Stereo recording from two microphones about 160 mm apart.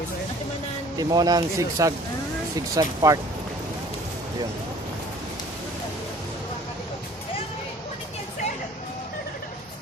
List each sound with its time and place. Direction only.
0.9 s speech: 25° right (ahead or behind)